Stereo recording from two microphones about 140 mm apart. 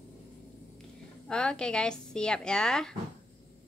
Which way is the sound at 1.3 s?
5° left (ahead or behind).